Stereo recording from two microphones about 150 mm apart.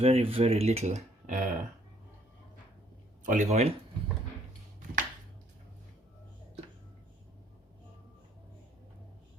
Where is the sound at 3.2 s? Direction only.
50° right (ahead or behind).